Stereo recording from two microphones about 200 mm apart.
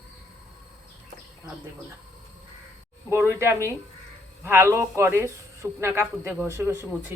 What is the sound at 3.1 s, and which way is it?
Speech, 10° right (ahead or behind).